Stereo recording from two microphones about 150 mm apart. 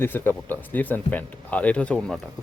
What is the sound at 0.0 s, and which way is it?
Speech, 15° left (ahead or behind).